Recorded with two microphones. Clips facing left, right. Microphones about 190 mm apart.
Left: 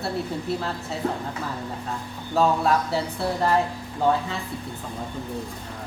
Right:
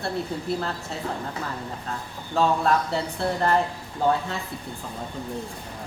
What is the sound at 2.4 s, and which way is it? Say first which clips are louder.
Speech: left 1 dB; 5° left (ahead or behind).